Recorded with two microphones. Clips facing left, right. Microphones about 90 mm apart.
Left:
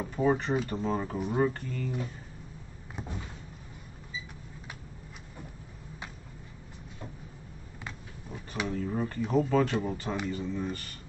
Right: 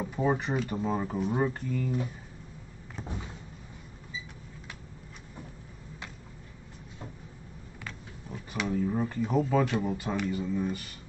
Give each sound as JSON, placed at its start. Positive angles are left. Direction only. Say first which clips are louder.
{"t": 0.0, "sound": "speech", "louder": "left 1 dB", "side_deg": -5}
{"t": 3.0, "sound": "a sound", "louder": "even", "side_deg": 5}
{"t": 8.6, "sound": "speech", "louder": "right 3 dB", "side_deg": -5}